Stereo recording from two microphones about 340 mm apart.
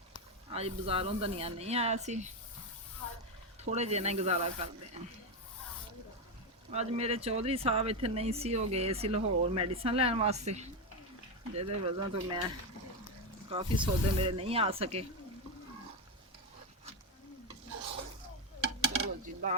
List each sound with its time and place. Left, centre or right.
0.5 s speech: centre
3.6 s speech: centre
5.0 s a sound: centre
6.7 s speech: centre
13.5 s speech: centre
19.0 s a sound: right